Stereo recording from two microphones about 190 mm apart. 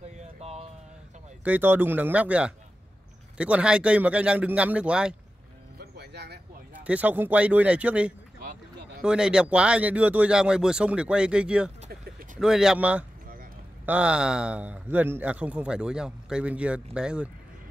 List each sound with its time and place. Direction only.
0.2 s a sound: 35° right (ahead or behind)
1.4 s a man's voice: 10° right (ahead or behind)
5.8 s music: 60° right (ahead or behind)
6.7 s a man's voice: 10° right (ahead or behind)